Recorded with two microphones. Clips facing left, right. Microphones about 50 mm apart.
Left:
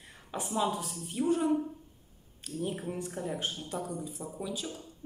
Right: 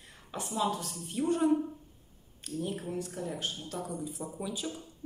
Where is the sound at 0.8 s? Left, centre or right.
Centre.